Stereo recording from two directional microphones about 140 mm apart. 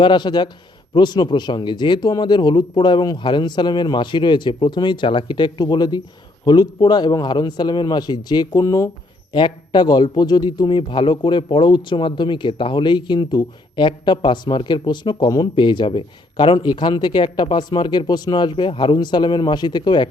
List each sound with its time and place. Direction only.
0.0 s speech: 35° left (ahead or behind)